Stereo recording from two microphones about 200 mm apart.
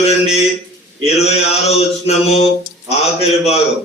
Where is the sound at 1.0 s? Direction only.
30° left (ahead or behind).